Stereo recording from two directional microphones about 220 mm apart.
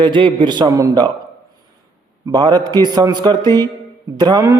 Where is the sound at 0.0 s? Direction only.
25° right (ahead or behind).